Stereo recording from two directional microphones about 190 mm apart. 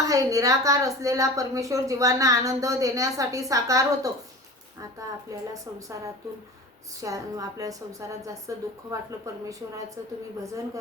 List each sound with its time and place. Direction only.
0.1 s a woman's voice: 15° right (ahead or behind)
5.3 s a woman's voice: 15° right (ahead or behind)